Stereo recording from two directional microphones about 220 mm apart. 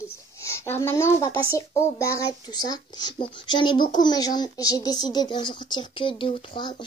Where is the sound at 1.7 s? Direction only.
15° left (ahead or behind).